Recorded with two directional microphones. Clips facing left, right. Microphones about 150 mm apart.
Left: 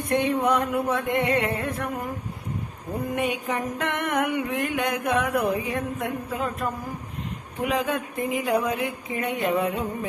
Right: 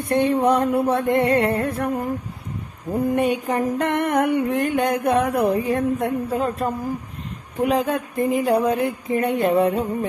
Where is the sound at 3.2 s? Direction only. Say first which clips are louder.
Right 6 dB; 35° right (ahead or behind).